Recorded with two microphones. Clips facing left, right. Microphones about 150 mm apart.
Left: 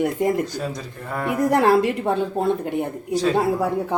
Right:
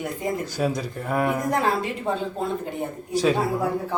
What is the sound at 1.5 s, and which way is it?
A woman's voice, 70° left (ahead or behind).